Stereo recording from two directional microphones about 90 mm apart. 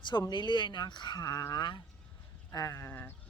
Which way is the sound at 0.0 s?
55° left (ahead or behind).